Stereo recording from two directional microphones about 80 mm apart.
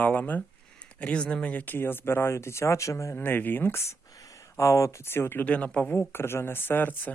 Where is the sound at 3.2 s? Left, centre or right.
Left.